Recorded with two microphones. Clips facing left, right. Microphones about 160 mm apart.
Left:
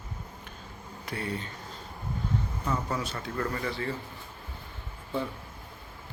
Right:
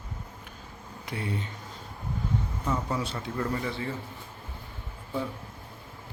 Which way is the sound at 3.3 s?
10° right (ahead or behind).